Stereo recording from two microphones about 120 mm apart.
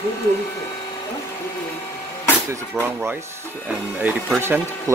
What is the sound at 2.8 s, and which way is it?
Speech, 15° right (ahead or behind).